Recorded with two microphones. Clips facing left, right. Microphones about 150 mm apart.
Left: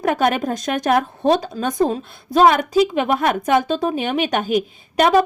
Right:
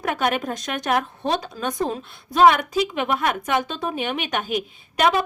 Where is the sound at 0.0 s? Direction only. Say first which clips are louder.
Left 5 dB; 40° left (ahead or behind).